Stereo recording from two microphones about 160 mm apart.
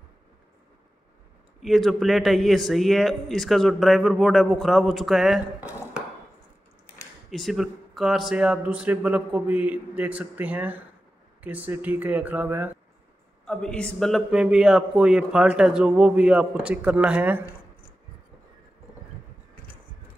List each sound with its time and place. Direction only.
1.6 s a man's voice: centre (ahead or behind)
7.2 s a man's voice: centre (ahead or behind)
13.5 s a man's voice: 5° left (ahead or behind)